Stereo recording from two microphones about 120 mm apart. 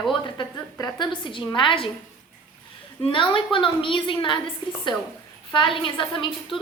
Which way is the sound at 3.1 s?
45° left (ahead or behind).